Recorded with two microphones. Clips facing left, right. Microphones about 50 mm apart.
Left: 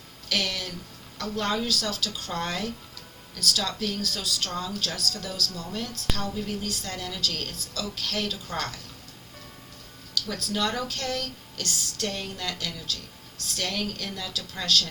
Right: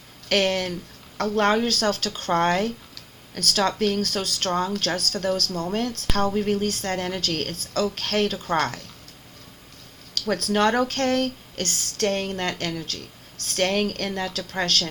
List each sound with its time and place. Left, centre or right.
0.3 s speech: right
10.2 s speech: right